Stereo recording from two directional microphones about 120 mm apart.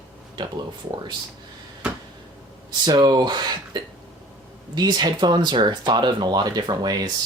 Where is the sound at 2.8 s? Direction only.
35° right (ahead or behind).